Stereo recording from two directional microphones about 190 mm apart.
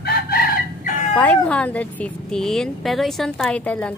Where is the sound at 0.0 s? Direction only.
55° left (ahead or behind).